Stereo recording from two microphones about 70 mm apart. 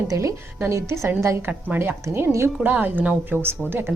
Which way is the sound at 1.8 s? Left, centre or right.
Right.